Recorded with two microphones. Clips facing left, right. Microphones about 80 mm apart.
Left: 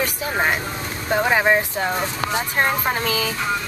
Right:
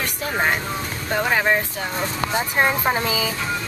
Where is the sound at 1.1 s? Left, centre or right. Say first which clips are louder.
Left 2 dB; centre.